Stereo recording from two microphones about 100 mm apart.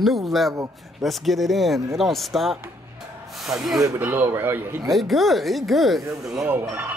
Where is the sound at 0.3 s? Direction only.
Centre (ahead or behind).